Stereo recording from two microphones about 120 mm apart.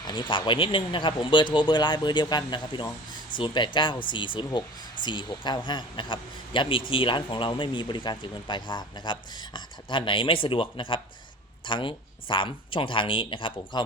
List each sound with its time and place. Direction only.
0.0 s a man's voice: 40° left (ahead or behind)